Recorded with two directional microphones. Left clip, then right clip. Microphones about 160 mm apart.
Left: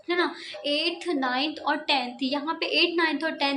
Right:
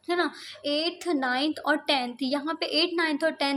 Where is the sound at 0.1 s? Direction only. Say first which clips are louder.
Left 1 dB; 45° right (ahead or behind).